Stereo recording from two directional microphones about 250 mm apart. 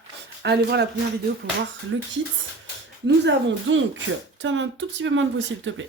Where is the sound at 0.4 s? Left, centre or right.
Right.